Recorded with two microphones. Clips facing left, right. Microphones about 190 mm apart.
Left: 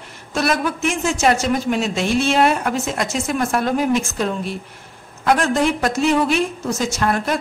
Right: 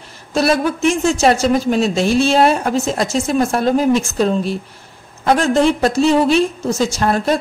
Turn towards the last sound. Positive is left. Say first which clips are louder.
# right 4 dB
turn(degrees=-30)  # may be behind; listen again after turning